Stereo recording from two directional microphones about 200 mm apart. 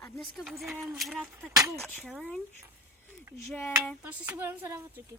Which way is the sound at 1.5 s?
15° right (ahead or behind).